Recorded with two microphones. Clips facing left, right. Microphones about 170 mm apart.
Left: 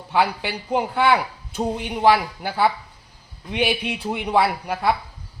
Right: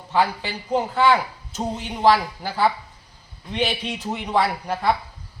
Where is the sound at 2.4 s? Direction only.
60° left (ahead or behind).